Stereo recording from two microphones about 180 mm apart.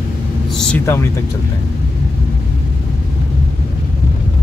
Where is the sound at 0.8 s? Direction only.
15° left (ahead or behind).